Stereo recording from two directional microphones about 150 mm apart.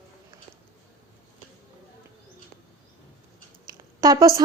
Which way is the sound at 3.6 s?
25° right (ahead or behind).